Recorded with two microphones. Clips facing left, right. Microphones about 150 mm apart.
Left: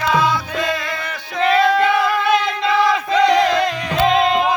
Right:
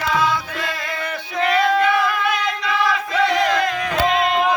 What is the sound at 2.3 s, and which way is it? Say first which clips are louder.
Battle cry: left 5 dB; 25° left (ahead or behind).